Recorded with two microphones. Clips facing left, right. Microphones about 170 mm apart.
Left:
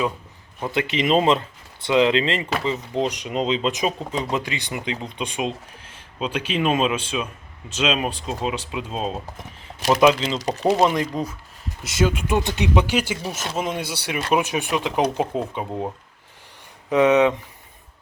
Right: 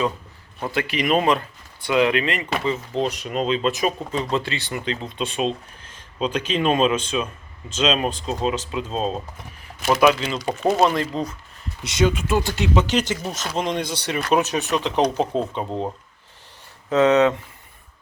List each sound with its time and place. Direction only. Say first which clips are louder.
0.7 s speech: left 1 dB; 20° left (ahead or behind)
9.6 s a sound: left 1 dB; 25° left (ahead or behind)
10.0 s speech: left 1 dB; 20° left (ahead or behind); by 12.2 s 5° left (ahead or behind)
12.3 s speech: even; 20° left (ahead or behind)
16.9 s speech: even; 10° left (ahead or behind)